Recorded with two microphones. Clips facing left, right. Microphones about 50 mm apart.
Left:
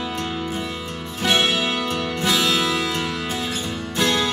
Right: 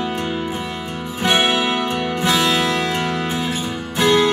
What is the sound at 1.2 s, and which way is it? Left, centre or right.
Music, centre.